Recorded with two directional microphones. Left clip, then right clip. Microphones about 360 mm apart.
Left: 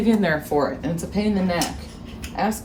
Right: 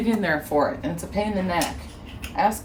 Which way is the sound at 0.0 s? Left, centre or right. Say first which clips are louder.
Left 3 dB; centre.